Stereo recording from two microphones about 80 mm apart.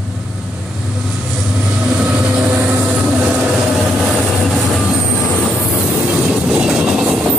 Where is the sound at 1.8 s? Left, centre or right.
Centre.